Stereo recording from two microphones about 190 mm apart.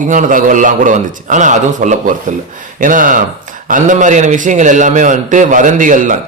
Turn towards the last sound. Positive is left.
turn(degrees=-45)  # may be behind; listen again after turning